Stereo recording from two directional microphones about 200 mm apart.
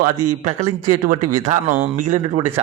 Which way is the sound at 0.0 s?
40° right (ahead or behind).